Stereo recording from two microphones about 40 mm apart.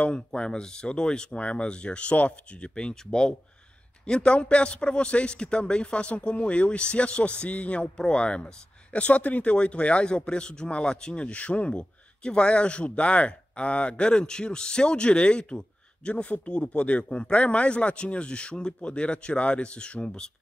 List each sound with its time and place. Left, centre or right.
0.0 s a man's voice: left
8.9 s a man's voice: left